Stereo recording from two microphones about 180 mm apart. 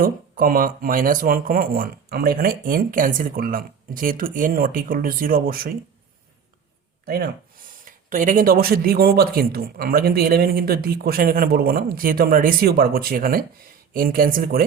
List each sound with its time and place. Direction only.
0.0 s speech: 55° right (ahead or behind)
7.0 s speech: 55° right (ahead or behind)